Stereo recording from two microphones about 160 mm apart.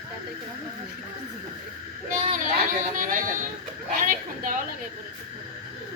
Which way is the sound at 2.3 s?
55° right (ahead or behind).